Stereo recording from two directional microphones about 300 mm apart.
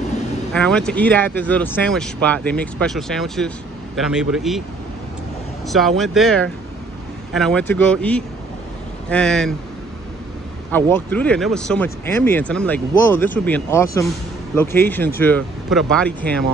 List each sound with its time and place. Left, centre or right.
0.5 s speech: centre
5.7 s speech: centre
10.7 s speech: centre